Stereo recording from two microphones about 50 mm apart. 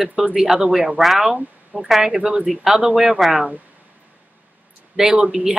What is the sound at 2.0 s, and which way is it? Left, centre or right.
Speech, centre.